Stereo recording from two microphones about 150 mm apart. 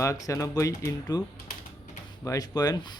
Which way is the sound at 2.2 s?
25° left (ahead or behind).